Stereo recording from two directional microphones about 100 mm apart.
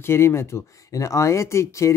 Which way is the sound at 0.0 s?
25° left (ahead or behind).